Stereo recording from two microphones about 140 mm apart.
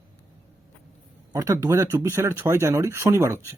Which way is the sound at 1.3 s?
20° right (ahead or behind).